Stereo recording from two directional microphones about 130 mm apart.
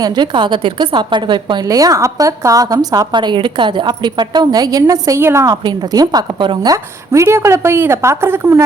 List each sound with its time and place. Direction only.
0.0 s a woman's voice: 35° right (ahead or behind)
7.1 s a woman's voice: 20° right (ahead or behind)